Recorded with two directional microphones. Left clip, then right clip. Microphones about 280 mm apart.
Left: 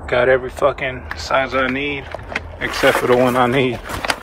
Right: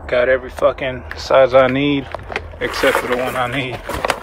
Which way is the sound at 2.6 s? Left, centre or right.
Centre.